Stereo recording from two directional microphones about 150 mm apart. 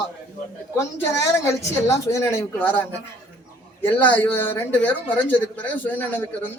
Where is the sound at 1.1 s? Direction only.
20° left (ahead or behind).